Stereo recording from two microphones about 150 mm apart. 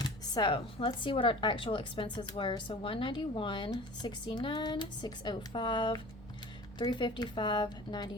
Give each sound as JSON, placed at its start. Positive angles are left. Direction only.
{"t": 0.0, "sound": "speech", "side_deg": 30}